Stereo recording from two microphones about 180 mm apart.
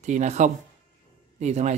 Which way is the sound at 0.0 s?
40° right (ahead or behind).